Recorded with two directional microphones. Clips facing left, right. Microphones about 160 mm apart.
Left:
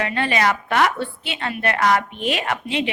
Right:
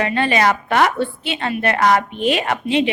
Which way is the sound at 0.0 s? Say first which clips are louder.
Right 4 dB; 25° right (ahead or behind).